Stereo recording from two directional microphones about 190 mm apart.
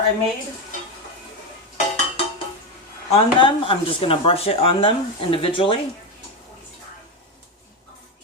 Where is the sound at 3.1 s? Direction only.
25° left (ahead or behind).